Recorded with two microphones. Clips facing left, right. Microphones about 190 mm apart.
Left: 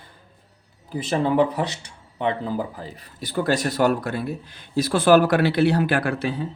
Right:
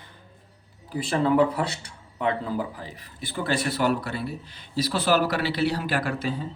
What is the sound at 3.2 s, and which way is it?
Speech, 40° left (ahead or behind).